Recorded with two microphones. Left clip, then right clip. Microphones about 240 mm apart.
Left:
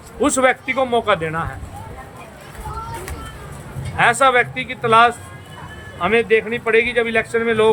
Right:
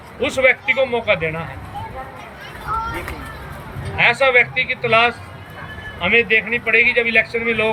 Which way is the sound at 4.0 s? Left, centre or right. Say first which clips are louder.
Even; centre.